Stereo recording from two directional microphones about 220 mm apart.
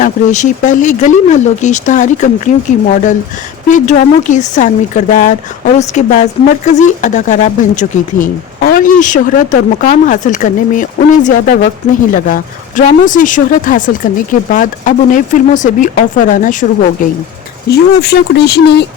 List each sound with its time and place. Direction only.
0.0 s speech: 35° left (ahead or behind)
17.7 s speech: 50° left (ahead or behind)